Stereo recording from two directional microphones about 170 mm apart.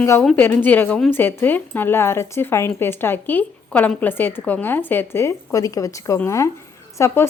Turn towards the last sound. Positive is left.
turn(degrees=15)  # may be behind; listen again after turning